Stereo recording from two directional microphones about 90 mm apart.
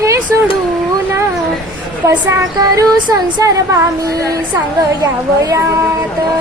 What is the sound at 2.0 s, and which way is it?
Speech, 30° right (ahead or behind).